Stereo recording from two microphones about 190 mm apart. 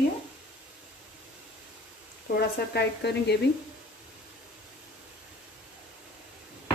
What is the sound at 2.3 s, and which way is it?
Speech, 60° left (ahead or behind).